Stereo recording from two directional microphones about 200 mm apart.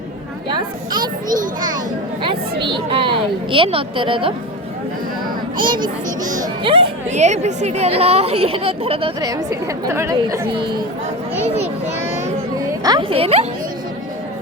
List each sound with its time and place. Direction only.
0.4 s speech: 25° right (ahead or behind)
2.6 s speech: 25° right (ahead or behind)
5.5 s speech: 25° right (ahead or behind)
11.4 s children playing: 30° right (ahead or behind)
12.8 s speech: 20° right (ahead or behind)